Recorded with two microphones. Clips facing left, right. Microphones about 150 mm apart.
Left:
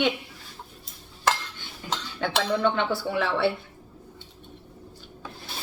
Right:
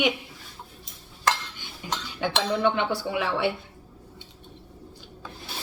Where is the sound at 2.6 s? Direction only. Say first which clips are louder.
Even; 15° right (ahead or behind).